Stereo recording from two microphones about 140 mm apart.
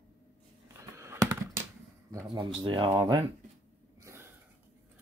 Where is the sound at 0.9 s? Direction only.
20° right (ahead or behind).